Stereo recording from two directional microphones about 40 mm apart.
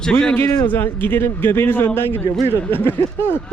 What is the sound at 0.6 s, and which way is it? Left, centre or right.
Speech, left.